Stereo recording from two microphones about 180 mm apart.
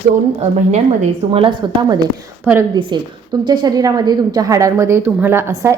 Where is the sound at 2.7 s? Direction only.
25° right (ahead or behind).